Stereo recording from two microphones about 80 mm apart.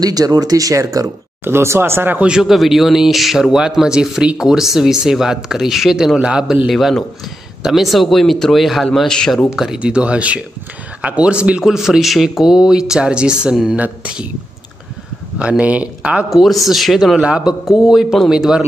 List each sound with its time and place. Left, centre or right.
0.0 s speech: right
1.4 s speech: right
2.1 s speech: centre
6.7 s speech: centre
9.6 s speech: centre
15.3 s speech: centre
16.3 s speech: centre